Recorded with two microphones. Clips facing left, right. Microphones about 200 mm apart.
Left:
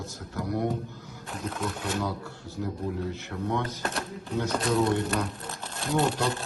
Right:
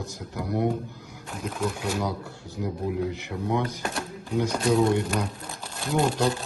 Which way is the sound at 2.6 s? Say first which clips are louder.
Right 4 dB; 15° right (ahead or behind).